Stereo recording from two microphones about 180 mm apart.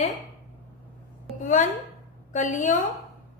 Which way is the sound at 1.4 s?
45° left (ahead or behind).